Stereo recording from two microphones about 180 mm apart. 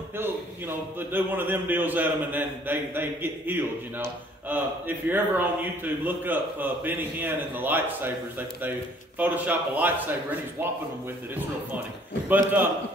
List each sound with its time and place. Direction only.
0.2 s a man's voice: 10° right (ahead or behind)
12.3 s a man's voice: 10° right (ahead or behind)